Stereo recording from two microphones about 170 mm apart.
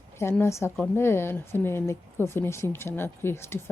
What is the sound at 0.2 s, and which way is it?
Speech, 15° left (ahead or behind).